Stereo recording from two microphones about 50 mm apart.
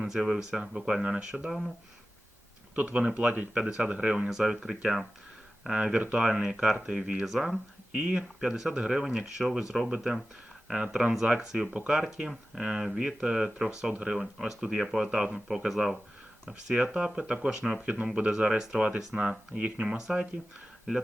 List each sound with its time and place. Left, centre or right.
0.0 s speech: centre
2.7 s speech: right
4.3 s speech: centre
7.3 s speech: centre
7.5 s speech: centre
9.6 s speech: centre
17.8 s speech: centre